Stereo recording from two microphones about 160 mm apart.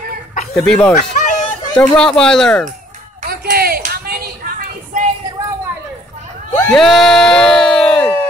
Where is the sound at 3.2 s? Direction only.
70° right (ahead or behind).